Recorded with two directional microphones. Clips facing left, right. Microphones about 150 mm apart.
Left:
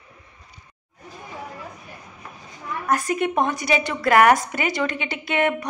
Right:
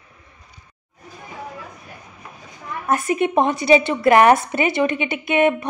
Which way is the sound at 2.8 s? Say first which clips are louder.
Right 3 dB; 25° right (ahead or behind).